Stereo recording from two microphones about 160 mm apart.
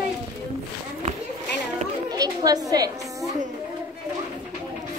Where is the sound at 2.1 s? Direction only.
25° right (ahead or behind).